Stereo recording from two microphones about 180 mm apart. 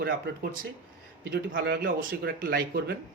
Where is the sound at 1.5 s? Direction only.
55° right (ahead or behind).